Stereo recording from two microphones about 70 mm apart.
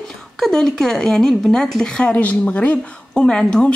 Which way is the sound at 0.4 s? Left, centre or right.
Centre.